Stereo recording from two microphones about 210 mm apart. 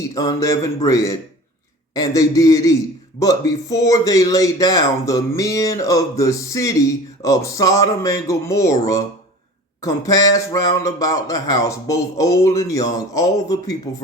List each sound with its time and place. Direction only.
0.1 s speech: 15° left (ahead or behind)